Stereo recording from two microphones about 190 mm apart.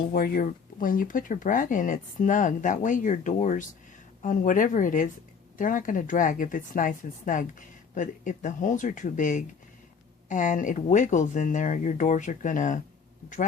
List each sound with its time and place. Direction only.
0.1 s speech: 50° left (ahead or behind)